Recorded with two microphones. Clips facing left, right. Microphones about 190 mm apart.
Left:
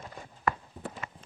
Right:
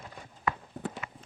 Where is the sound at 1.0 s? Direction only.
45° left (ahead or behind).